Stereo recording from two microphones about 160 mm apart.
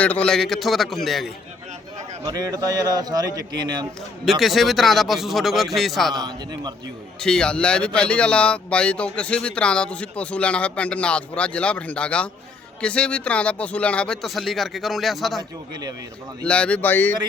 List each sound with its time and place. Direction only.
0.0 s speech: 10° left (ahead or behind)
2.2 s a man's voice: 25° right (ahead or behind)
4.3 s speech: centre (ahead or behind)
6.1 s a man's voice: 25° right (ahead or behind)
7.2 s speech: 5° left (ahead or behind)
15.7 s a man's voice: 25° right (ahead or behind)
16.4 s speech: 5° left (ahead or behind)